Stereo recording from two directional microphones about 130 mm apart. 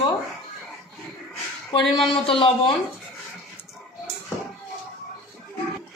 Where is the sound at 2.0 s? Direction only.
40° left (ahead or behind).